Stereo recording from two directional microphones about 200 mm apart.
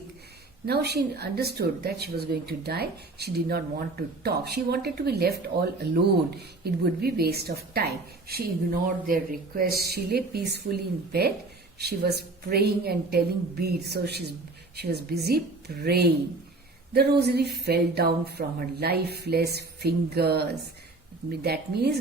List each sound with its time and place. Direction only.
0.6 s speech: 50° right (ahead or behind)